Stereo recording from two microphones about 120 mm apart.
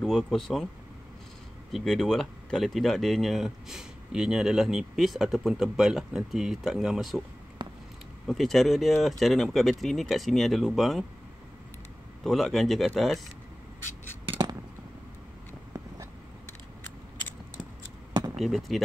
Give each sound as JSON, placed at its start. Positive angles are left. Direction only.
{"t": 0.0, "sound": "speech", "side_deg": 0}
{"t": 1.7, "sound": "speech", "side_deg": 0}
{"t": 7.6, "sound": "a sound", "side_deg": -40}
{"t": 8.3, "sound": "speech", "side_deg": 0}
{"t": 12.2, "sound": "speech", "side_deg": 0}
{"t": 18.3, "sound": "speech", "side_deg": 0}